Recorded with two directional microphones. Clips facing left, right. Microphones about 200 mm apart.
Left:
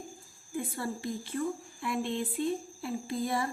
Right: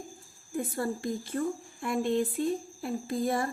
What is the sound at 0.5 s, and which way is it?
A woman's voice, 45° right (ahead or behind).